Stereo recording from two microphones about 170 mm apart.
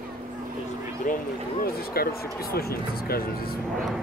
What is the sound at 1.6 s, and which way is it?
Speech, 60° left (ahead or behind).